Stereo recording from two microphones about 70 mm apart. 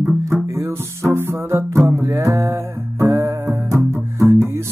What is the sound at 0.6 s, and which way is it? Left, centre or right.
Music, right.